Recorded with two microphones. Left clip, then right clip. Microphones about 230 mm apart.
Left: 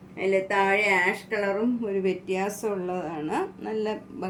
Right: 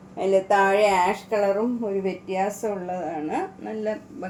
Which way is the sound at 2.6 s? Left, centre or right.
Left.